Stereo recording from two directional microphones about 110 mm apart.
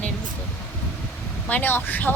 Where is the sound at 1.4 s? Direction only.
15° left (ahead or behind).